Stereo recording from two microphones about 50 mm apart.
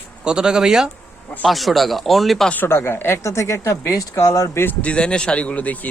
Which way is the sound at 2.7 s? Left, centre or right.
Left.